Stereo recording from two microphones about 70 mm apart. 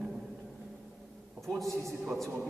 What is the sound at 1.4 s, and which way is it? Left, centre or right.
Speech, centre.